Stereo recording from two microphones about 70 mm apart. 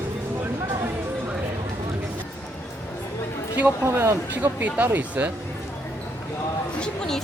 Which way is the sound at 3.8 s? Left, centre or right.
Right.